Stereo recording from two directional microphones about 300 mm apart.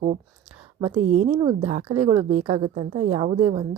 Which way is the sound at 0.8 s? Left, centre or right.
Right.